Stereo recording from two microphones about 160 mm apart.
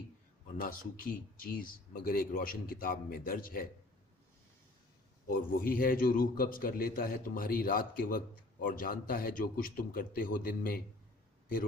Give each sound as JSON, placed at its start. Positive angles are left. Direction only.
{"t": 0.6, "sound": "speech", "side_deg": 60}
{"t": 5.5, "sound": "speech", "side_deg": 60}